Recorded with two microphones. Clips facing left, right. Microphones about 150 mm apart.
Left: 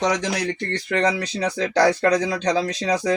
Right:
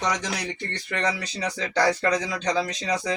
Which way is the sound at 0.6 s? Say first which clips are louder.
Left 7 dB; 85° left.